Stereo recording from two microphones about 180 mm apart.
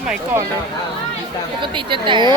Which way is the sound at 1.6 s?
25° right (ahead or behind).